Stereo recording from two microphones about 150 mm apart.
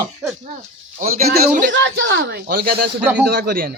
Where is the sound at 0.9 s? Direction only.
70° right (ahead or behind).